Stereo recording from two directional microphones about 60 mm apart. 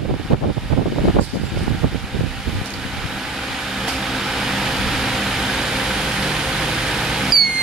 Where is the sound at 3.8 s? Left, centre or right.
Centre.